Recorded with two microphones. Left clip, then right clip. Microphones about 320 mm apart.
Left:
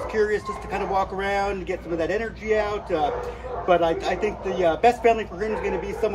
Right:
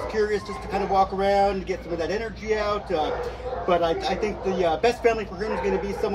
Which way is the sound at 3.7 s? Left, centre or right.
Centre.